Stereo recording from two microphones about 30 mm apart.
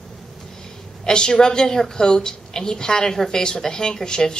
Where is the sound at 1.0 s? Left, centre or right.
Left.